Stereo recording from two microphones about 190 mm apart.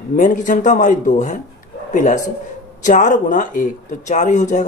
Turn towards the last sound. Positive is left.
turn(degrees=40)  # may be behind; listen again after turning